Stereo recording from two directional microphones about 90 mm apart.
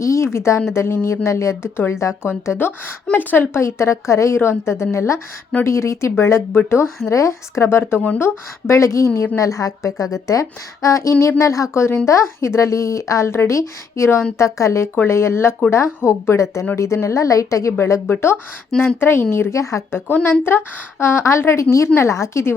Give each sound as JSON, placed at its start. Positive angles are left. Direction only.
{"t": 0.0, "sound": "a woman's voice", "side_deg": 35}
{"t": 8.0, "sound": "speech", "side_deg": 15}
{"t": 8.6, "sound": "a woman's voice", "side_deg": 35}